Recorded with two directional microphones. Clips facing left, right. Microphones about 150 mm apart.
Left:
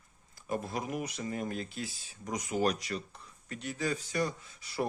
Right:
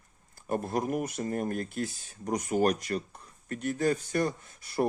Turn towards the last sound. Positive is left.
turn(degrees=-55)  # may be behind; listen again after turning